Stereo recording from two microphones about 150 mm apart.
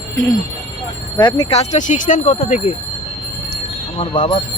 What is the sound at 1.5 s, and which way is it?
Speech, 50° left (ahead or behind).